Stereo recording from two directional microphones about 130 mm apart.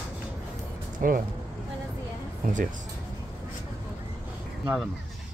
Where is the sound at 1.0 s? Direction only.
90° right.